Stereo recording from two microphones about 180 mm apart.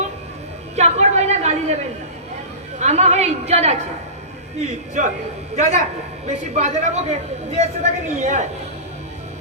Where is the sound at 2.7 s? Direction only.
40° right (ahead or behind).